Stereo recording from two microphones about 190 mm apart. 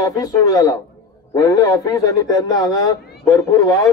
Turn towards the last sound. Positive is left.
turn(degrees=15)  # may be behind; listen again after turning